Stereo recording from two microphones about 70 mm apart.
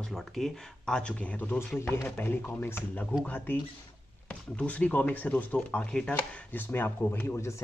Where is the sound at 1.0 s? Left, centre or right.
Centre.